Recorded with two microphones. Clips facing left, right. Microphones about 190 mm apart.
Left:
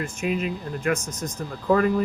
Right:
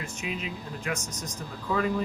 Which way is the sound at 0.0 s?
50° left (ahead or behind).